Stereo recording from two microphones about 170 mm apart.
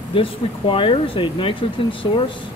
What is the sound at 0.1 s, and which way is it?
Speech, 30° left (ahead or behind).